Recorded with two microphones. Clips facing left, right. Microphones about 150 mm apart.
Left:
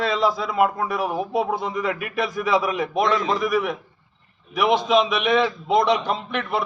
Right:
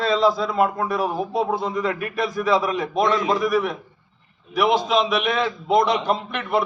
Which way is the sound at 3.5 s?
5° left (ahead or behind).